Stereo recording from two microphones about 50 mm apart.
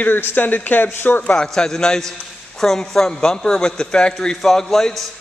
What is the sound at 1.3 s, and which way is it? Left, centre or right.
A man's voice, centre.